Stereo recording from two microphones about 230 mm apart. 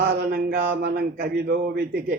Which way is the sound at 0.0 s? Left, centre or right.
Right.